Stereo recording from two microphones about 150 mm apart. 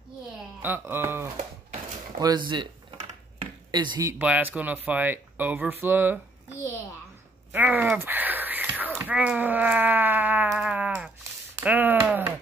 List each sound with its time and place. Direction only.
0.6 s speech: 15° right (ahead or behind)
2.1 s speech: 30° right (ahead or behind)
3.7 s speech: 30° right (ahead or behind)
4.1 s speech: 10° right (ahead or behind)
7.5 s a sound: 10° right (ahead or behind)